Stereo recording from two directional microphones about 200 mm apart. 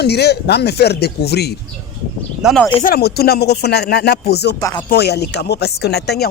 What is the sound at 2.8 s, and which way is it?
Speech, 50° left (ahead or behind).